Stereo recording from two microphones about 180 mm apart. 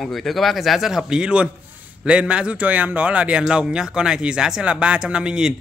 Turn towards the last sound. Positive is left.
turn(degrees=-5)  # may be behind; listen again after turning